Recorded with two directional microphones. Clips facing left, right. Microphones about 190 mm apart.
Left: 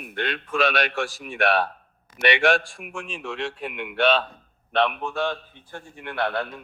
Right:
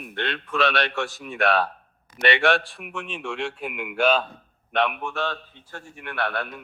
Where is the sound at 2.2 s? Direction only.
15° left (ahead or behind).